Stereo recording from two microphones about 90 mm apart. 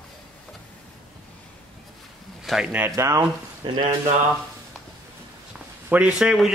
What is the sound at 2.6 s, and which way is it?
Speech, 15° right (ahead or behind).